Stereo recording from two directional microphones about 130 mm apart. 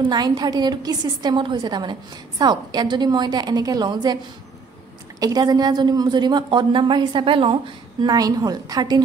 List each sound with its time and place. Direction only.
0.1 s a woman's voice: 30° right (ahead or behind)
5.2 s a woman's voice: 30° right (ahead or behind)